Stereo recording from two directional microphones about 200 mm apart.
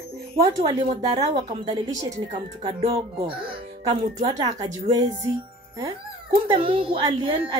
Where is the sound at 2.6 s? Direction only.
30° right (ahead or behind).